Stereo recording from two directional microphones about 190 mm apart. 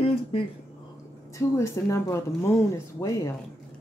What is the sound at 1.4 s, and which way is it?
Speech, 15° left (ahead or behind).